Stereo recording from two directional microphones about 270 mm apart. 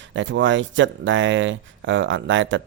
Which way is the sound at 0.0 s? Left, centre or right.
Right.